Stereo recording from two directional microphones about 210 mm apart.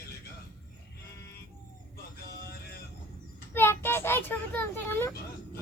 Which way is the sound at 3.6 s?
10° left (ahead or behind).